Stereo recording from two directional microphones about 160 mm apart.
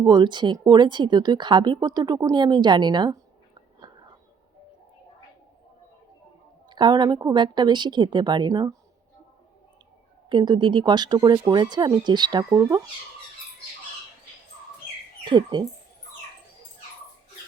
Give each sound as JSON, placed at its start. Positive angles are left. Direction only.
{"t": 0.0, "sound": "speech", "side_deg": -25}
{"t": 6.7, "sound": "speech", "side_deg": -30}
{"t": 10.2, "sound": "speech", "side_deg": -30}
{"t": 15.2, "sound": "speech", "side_deg": -30}